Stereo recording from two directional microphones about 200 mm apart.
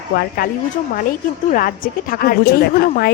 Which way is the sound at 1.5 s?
45° left (ahead or behind).